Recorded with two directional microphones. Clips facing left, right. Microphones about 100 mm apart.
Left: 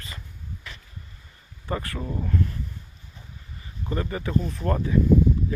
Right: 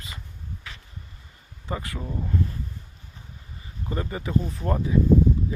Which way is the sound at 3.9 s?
20° right (ahead or behind).